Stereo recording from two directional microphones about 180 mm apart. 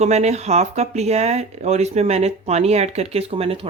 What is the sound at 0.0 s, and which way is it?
Speech, 40° right (ahead or behind).